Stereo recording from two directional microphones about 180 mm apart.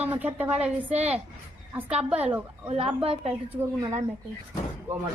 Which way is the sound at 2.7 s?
35° right (ahead or behind).